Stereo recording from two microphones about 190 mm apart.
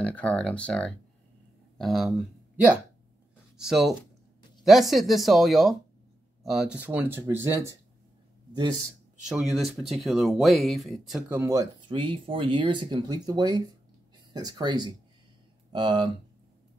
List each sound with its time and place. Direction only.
0.0 s speech: 5° left (ahead or behind); by 7.7 s 15° right (ahead or behind)
9.3 s speech: centre (ahead or behind); by 16.1 s 25° right (ahead or behind)